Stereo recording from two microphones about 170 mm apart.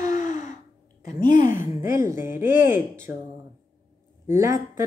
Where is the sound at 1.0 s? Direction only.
50° left (ahead or behind).